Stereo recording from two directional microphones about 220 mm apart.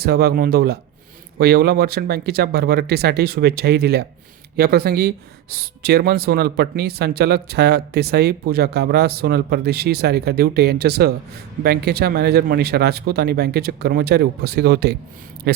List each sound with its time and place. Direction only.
0.0 s speech: 45° right (ahead or behind)